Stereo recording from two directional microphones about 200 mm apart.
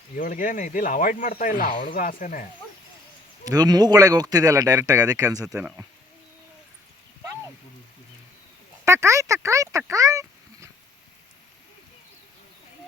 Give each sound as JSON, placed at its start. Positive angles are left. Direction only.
{"t": 0.2, "sound": "speech", "side_deg": 40}
{"t": 3.4, "sound": "speech", "side_deg": -20}
{"t": 8.8, "sound": "speech", "side_deg": -15}